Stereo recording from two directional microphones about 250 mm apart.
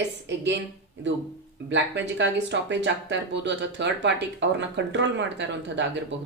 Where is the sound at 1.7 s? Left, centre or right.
Right.